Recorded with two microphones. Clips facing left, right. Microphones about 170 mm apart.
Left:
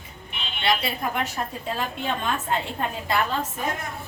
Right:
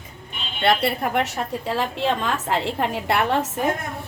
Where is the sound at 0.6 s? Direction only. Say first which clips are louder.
Right 5 dB; 60° right (ahead or behind).